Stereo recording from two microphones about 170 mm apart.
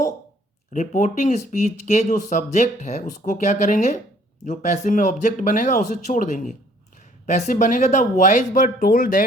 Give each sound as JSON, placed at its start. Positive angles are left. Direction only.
{"t": 0.7, "sound": "speech", "side_deg": 50}